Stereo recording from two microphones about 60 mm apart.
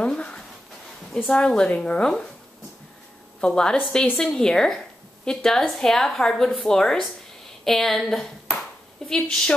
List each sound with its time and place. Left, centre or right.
0.0 s writing: centre
1.1 s speech: centre
3.3 s a woman's voice: centre